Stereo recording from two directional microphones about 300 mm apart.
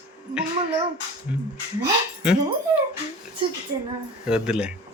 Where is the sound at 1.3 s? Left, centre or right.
Centre.